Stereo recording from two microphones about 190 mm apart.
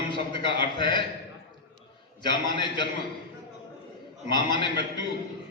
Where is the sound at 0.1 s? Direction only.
25° left (ahead or behind).